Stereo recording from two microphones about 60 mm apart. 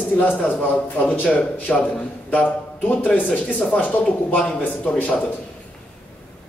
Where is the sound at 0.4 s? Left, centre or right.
Left.